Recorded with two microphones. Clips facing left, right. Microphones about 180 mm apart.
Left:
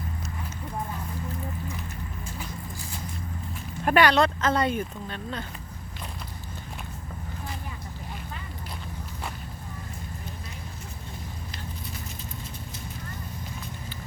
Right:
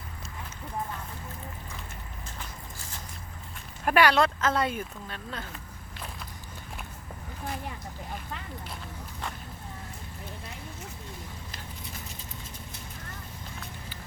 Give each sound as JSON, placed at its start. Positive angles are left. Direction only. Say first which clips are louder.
{"t": 3.8, "sound": "speech", "louder": "left 2 dB", "side_deg": -5}